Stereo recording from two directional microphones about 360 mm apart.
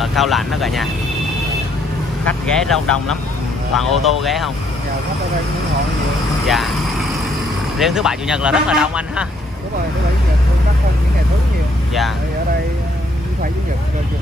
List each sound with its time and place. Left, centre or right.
0.0 s speech: centre
2.2 s speech: centre
6.4 s speech: centre
7.8 s speech: centre